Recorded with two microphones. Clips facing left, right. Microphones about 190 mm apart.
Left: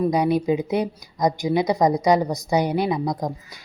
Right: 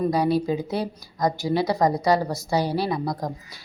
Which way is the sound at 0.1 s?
20° left (ahead or behind).